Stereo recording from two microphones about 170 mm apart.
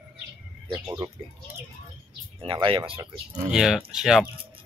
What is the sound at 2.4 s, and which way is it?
Speech, 35° right (ahead or behind).